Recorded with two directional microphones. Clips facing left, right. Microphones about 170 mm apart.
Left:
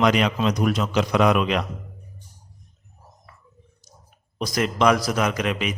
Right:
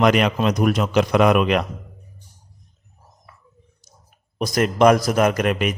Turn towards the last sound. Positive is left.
turn(degrees=-50)  # may be behind; listen again after turning